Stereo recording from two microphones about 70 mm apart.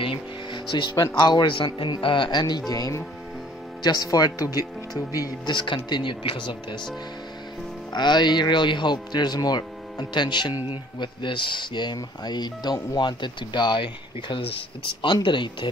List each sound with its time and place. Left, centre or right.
0.7 s speech: left
2.7 s speech: left
3.8 s speech: left
5.9 s speech: left
7.9 s speech: left
15.0 s speech: left